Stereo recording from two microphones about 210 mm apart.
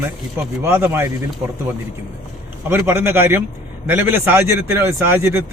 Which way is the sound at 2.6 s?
10° right (ahead or behind).